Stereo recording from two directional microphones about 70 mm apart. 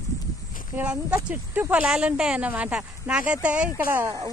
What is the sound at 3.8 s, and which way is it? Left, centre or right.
Speech, right.